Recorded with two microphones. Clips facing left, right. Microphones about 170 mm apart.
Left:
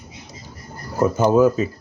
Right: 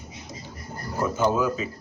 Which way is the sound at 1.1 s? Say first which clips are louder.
Left 8 dB; 40° left (ahead or behind).